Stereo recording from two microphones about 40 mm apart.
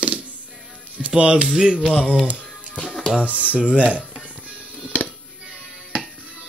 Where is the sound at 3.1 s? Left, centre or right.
Right.